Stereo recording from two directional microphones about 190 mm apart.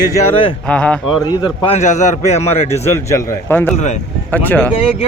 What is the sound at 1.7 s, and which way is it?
Speech, 40° left (ahead or behind).